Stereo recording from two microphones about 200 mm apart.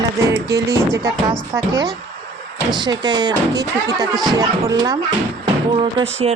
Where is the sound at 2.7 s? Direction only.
20° right (ahead or behind).